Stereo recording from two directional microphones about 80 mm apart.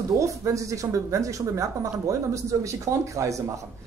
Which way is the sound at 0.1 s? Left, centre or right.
Right.